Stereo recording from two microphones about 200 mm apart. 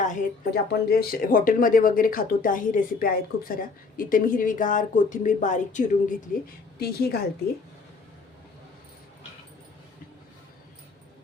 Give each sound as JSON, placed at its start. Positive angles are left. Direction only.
{"t": 0.0, "sound": "speech", "side_deg": 45}
{"t": 6.7, "sound": "speech", "side_deg": 50}